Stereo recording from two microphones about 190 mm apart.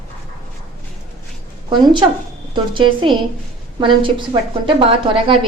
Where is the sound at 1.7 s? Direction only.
25° right (ahead or behind).